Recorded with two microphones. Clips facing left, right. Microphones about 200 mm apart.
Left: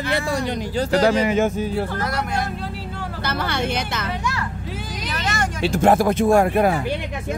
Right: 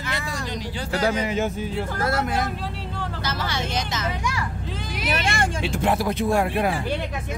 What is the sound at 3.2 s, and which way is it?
Music, 60° left (ahead or behind).